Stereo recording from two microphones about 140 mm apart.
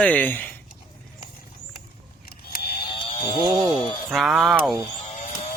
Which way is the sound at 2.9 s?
35° left (ahead or behind).